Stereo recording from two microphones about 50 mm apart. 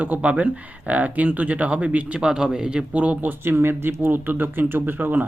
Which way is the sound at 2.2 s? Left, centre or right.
Centre.